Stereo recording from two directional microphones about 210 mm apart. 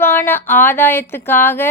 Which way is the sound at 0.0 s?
10° left (ahead or behind).